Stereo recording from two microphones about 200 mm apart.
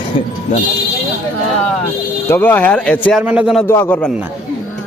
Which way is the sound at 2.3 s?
10° left (ahead or behind).